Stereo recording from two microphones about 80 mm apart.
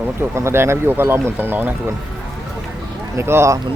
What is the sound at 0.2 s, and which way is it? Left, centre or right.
Speech, right.